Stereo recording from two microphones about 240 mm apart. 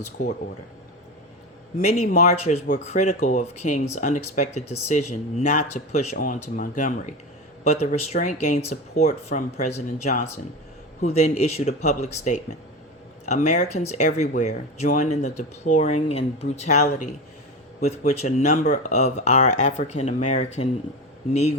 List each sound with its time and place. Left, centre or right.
0.2 s speech: left
1.8 s speech: left
2.0 s speech: left